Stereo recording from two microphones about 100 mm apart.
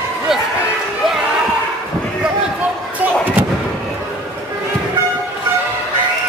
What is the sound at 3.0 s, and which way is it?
Slam, 15° right (ahead or behind).